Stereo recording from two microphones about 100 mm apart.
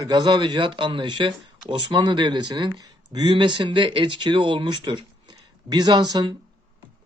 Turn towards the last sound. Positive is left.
turn(degrees=-45)  # may be behind; listen again after turning